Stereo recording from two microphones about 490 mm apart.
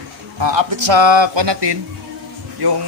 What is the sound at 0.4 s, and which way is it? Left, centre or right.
Speech, right.